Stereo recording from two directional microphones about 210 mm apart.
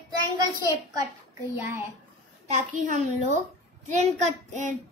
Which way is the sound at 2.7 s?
35° right (ahead or behind).